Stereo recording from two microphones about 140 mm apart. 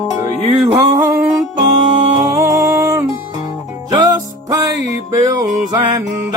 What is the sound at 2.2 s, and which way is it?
Music, 25° right (ahead or behind).